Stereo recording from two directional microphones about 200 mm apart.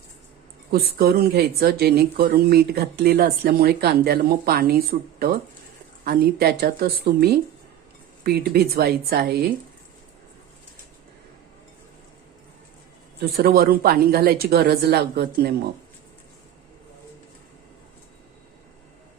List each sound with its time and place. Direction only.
0.7 s speech: 50° right (ahead or behind)
13.1 s speech: 50° right (ahead or behind)